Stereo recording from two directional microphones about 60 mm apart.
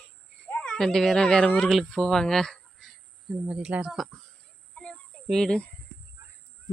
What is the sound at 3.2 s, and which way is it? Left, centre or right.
Speech, centre.